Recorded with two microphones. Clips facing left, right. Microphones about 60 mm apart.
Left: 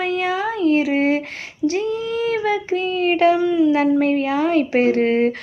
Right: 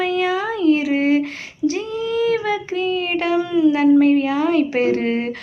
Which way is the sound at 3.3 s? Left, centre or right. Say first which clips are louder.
Even; centre.